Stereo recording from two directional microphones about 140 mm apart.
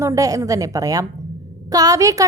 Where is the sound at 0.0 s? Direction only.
25° right (ahead or behind).